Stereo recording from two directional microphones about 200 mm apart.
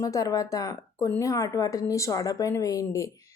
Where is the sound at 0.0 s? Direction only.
15° left (ahead or behind).